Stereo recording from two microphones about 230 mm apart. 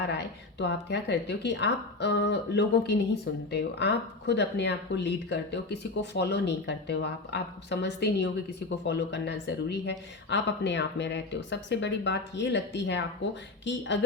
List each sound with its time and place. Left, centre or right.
0.6 s speech: left